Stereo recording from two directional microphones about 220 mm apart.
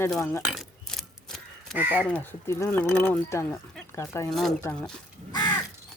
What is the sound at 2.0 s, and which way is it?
Speech, 5° left (ahead or behind).